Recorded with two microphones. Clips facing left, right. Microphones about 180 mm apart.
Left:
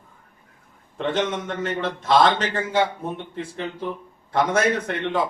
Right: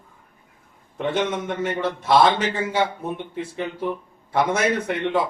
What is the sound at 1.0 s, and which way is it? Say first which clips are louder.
A man's voice: right 1 dB; 10° right (ahead or behind).